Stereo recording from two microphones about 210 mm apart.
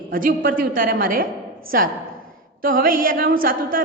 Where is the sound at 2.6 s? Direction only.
40° right (ahead or behind).